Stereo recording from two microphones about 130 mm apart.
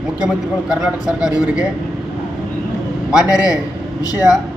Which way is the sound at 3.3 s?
30° left (ahead or behind).